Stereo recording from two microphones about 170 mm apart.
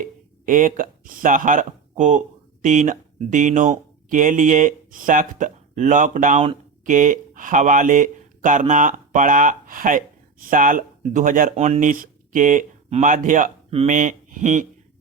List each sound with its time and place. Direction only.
0.0 s speech: 50° right (ahead or behind)